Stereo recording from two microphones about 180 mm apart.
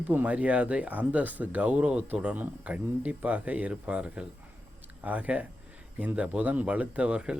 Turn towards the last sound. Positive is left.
turn(degrees=-5)  # may be behind; listen again after turning